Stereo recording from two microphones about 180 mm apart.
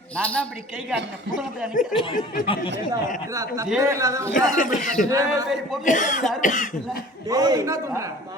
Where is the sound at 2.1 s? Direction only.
50° left (ahead or behind).